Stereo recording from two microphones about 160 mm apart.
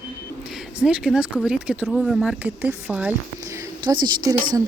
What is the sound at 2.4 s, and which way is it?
Speech, 15° right (ahead or behind).